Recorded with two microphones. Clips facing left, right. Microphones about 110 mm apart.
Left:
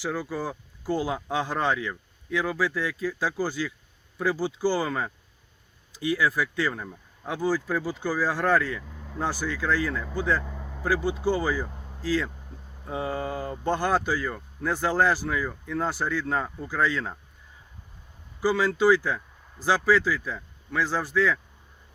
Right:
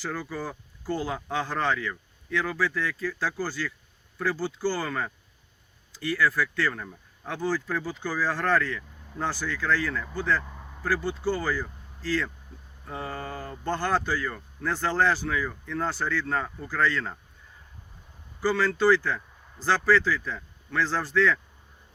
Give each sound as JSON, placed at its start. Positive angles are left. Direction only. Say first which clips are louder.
{"t": 0.0, "sound": "speech", "louder": "left 3 dB", "side_deg": 10}
{"t": 18.3, "sound": "speech", "louder": "left 1 dB", "side_deg": 15}